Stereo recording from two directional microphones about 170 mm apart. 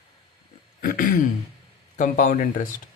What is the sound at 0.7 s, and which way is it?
Speech, 55° left (ahead or behind).